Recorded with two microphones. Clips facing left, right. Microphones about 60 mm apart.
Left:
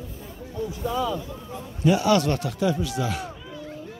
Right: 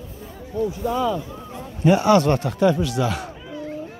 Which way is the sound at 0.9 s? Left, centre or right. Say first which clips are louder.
Right 4 dB; right.